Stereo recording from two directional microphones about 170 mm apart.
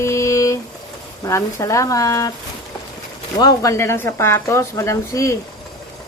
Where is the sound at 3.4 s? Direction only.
20° left (ahead or behind).